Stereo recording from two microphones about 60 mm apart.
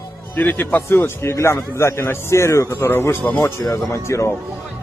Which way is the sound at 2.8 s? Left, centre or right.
Left.